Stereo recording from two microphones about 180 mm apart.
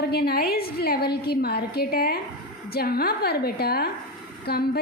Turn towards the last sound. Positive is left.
turn(degrees=60)  # may be behind; listen again after turning